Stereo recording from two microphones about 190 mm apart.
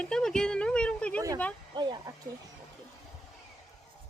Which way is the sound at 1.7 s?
25° right (ahead or behind).